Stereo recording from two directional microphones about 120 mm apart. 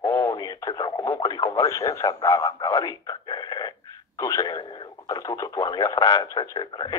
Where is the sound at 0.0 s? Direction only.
25° left (ahead or behind).